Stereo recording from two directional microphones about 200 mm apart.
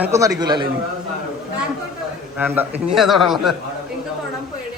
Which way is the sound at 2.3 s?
10° right (ahead or behind).